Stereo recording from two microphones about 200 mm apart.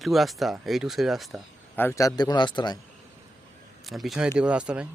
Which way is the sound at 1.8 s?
15° left (ahead or behind).